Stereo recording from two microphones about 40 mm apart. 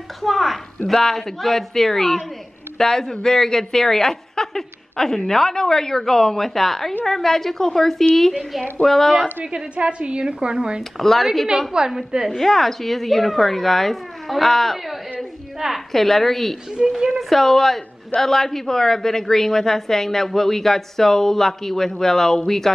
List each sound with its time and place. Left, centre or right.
0.2 s a man's voice: centre
8.2 s a man's voice: centre
9.8 s speech: right
10.8 s speech: centre
11.7 s a woman's voice: centre
12.3 s a man's voice: centre
16.8 s speech: right
17.2 s a man's voice: centre